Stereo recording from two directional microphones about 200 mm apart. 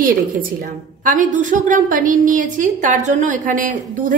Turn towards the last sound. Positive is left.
turn(degrees=-45)  # may be behind; listen again after turning